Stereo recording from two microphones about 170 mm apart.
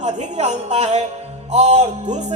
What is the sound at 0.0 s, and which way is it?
A woman's voice, 45° right (ahead or behind).